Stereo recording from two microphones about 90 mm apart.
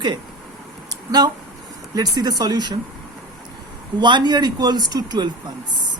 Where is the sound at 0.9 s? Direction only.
50° right (ahead or behind).